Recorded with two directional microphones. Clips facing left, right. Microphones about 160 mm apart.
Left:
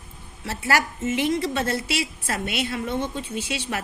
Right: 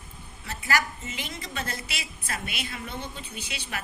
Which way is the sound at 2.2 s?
35° left (ahead or behind).